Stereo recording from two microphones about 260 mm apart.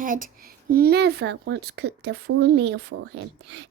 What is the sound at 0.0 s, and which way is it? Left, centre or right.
Speech, right.